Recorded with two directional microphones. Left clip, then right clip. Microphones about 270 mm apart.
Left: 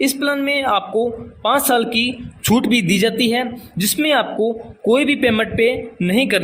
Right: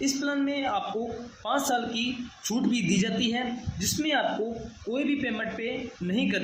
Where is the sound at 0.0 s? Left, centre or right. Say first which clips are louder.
Left 10 dB; left.